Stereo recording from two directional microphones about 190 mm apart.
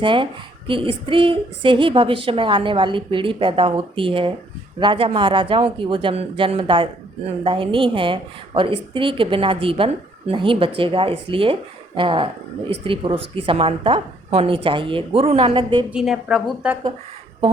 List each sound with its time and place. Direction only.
0.0 s a woman's voice: 25° right (ahead or behind)
15.9 s a woman's voice: 5° right (ahead or behind)